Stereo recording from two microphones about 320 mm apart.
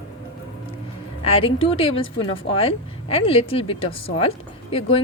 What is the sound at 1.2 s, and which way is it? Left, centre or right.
A woman's voice, centre.